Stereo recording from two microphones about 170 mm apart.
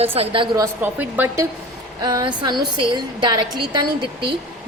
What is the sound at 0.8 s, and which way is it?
Speech, 10° right (ahead or behind).